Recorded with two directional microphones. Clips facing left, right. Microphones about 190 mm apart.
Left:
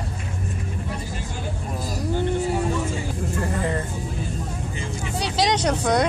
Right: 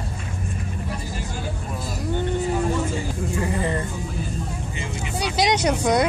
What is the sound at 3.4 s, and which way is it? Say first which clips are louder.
Speech: right 1 dB; centre (ahead or behind).